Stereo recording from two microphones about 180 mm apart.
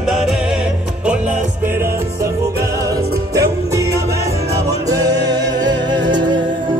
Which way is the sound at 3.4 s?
15° right (ahead or behind).